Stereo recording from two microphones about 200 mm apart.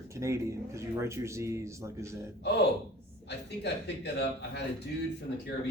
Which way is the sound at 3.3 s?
55° left (ahead or behind).